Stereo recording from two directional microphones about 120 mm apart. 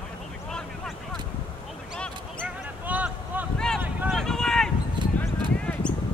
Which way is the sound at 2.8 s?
15° right (ahead or behind).